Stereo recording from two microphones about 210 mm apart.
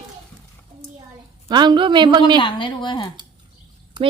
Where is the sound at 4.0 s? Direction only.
20° right (ahead or behind).